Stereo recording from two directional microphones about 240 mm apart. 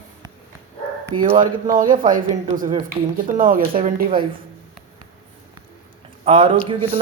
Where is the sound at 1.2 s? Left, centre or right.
Right.